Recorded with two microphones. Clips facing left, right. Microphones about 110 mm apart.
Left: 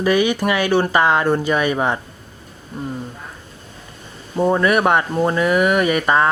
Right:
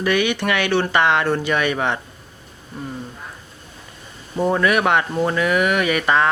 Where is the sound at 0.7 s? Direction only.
10° left (ahead or behind).